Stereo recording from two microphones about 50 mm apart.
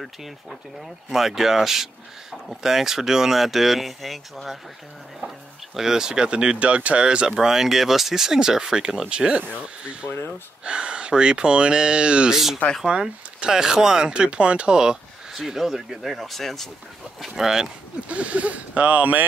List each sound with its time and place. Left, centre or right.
1.1 s speech: centre
5.2 s speech: right
5.8 s speech: centre
7.3 s speech: centre
10.0 s speech: left
10.6 s speech: right; by 16.6 s centre
17.2 s speech: centre
18.0 s speech: right